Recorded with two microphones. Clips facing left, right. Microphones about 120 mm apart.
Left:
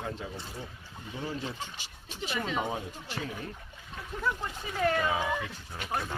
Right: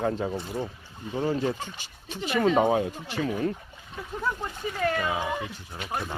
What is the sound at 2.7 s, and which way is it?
Speech, 70° right (ahead or behind).